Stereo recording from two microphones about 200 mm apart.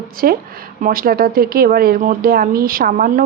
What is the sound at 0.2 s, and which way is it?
Speech, 45° right (ahead or behind).